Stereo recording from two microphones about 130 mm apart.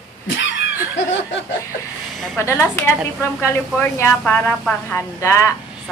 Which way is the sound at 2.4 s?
20° left (ahead or behind).